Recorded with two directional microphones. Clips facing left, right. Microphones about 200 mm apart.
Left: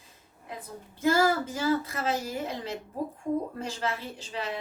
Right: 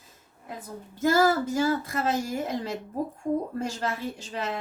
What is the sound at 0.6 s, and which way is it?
A woman's voice, 45° right (ahead or behind).